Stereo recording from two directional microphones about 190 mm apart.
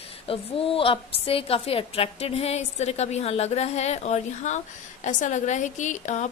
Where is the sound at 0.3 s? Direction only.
30° left (ahead or behind).